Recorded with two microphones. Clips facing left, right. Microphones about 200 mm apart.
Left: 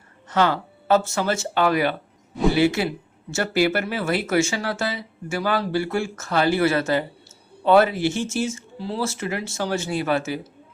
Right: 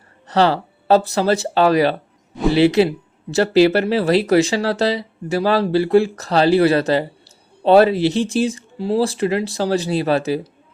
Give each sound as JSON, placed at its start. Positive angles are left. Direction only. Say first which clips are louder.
{"t": 0.3, "sound": "speech", "louder": "right 5 dB", "side_deg": -35}